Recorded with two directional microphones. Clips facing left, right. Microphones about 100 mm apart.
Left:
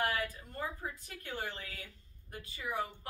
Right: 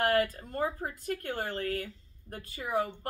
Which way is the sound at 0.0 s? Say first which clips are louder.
Right 8 dB; 55° right (ahead or behind).